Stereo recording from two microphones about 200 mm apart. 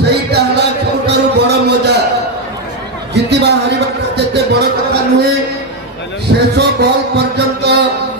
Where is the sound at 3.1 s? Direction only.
55° right (ahead or behind).